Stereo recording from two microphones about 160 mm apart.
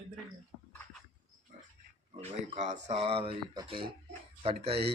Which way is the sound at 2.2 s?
45° right (ahead or behind).